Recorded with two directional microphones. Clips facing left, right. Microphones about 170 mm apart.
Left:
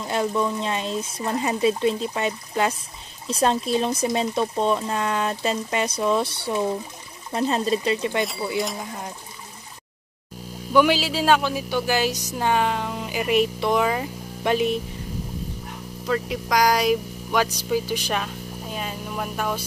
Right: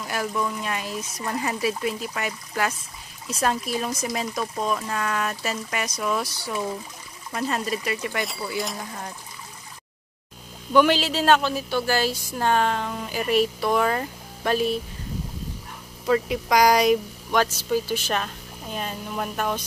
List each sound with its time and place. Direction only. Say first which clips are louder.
0.0 s speech: left 4 dB; 25° left (ahead or behind)
10.7 s speech: even; 10° left (ahead or behind)
16.1 s speech: right 3 dB; centre (ahead or behind); by 18.2 s 15° left (ahead or behind)
18.2 s speech: left 3 dB; 5° left (ahead or behind)